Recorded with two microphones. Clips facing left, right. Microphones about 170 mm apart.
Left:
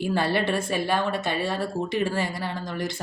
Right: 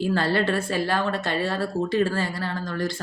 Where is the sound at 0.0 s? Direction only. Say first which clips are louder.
Right 1 dB; 15° left (ahead or behind).